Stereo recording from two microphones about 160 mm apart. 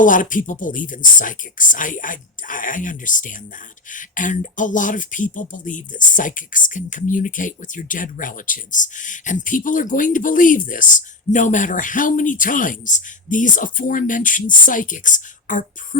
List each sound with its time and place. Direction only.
0.0 s speech: 55° left (ahead or behind)